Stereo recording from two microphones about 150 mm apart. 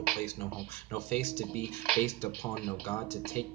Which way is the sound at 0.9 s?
15° left (ahead or behind).